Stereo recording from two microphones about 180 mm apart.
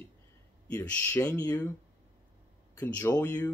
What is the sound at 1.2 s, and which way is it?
Speech, 20° left (ahead or behind).